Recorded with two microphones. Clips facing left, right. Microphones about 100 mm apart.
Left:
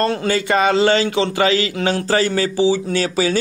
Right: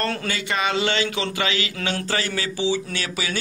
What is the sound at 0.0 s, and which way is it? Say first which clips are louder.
Speech: left 7 dB; 25° left (ahead or behind).